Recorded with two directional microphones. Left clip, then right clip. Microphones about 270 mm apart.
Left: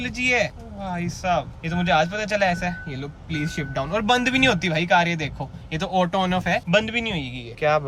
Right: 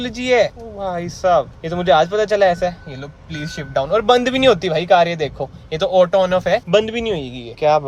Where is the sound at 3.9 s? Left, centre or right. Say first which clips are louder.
Right 6 dB; centre.